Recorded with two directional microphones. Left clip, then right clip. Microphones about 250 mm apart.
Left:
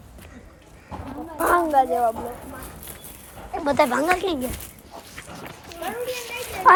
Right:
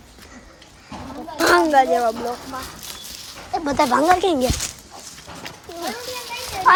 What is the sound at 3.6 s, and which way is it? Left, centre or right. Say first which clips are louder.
Speech: right 2 dB; centre.